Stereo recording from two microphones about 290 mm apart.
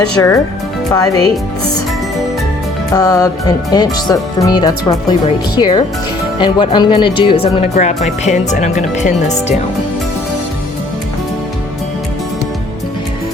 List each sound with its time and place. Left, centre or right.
0.2 s speech: centre
2.9 s speech: centre